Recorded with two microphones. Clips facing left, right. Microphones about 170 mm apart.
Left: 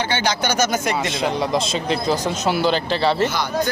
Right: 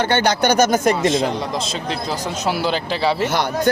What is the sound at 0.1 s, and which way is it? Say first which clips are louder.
Speech: right 5 dB; 55° right (ahead or behind).